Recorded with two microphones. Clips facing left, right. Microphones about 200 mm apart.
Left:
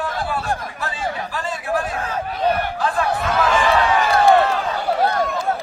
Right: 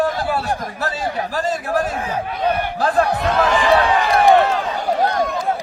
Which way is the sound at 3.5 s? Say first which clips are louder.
Right 1 dB; 15° right (ahead or behind).